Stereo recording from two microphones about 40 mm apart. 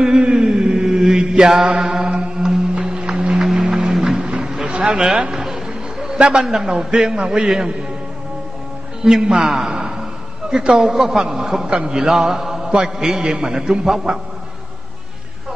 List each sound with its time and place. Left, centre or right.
0.2 s mantra: right
2.0 s mantra: right
2.7 s music: right
3.3 s music: centre
4.2 s a sound: right
6.1 s a man's voice: right
6.4 s a man's voice: centre
9.0 s a man's voice: centre